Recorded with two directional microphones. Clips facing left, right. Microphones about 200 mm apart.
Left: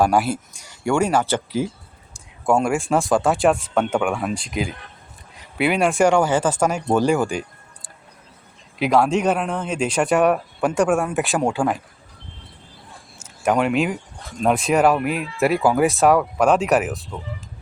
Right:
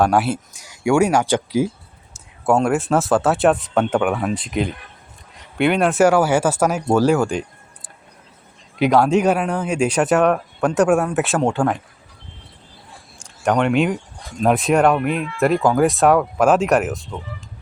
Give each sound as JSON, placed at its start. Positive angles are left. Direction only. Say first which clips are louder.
{"t": 0.2, "sound": "speech", "louder": "right 1 dB", "side_deg": -5}
{"t": 8.8, "sound": "speech", "louder": "right 3 dB", "side_deg": 0}
{"t": 10.2, "sound": "speech", "louder": "right 1 dB", "side_deg": 5}
{"t": 13.1, "sound": "speech", "louder": "right 1 dB", "side_deg": 5}